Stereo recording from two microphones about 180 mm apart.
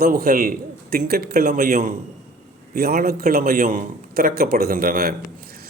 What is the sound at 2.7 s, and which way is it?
A man's voice, 60° right (ahead or behind).